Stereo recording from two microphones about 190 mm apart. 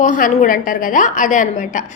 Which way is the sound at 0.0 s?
45° left (ahead or behind).